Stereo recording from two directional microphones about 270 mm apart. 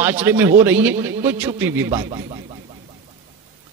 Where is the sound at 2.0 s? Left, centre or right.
Centre.